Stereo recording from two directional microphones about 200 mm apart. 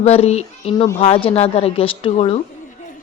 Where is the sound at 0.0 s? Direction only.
30° left (ahead or behind).